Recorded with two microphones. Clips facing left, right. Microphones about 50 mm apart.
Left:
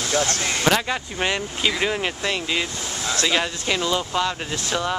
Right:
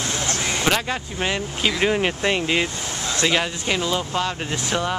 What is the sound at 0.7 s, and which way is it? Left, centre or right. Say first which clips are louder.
Speech: left 3 dB; centre.